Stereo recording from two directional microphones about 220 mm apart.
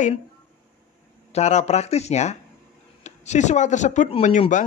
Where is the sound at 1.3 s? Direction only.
30° left (ahead or behind).